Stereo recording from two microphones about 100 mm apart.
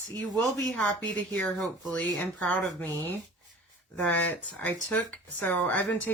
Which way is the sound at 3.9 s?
15° left (ahead or behind).